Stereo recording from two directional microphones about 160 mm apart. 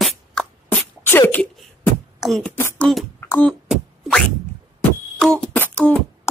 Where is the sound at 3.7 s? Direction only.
5° left (ahead or behind).